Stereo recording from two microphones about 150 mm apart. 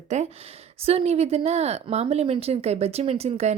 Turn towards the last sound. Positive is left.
turn(degrees=-45)  # may be behind; listen again after turning